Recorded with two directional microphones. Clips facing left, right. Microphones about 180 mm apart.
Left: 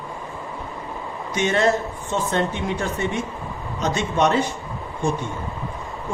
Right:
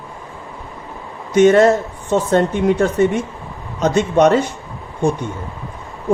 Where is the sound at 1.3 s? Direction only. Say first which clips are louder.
Right 10 dB; 50° right (ahead or behind).